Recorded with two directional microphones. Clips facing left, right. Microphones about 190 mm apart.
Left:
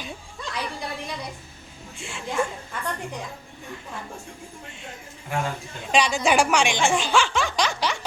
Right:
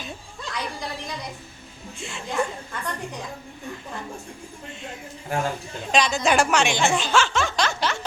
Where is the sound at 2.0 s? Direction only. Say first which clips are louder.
Right 1 dB; 10° left (ahead or behind).